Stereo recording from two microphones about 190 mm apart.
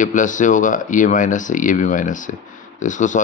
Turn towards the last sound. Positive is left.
turn(degrees=40)  # may be behind; listen again after turning